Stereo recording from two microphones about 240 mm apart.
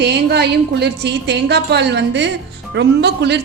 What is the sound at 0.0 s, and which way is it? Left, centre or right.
A woman's voice, right.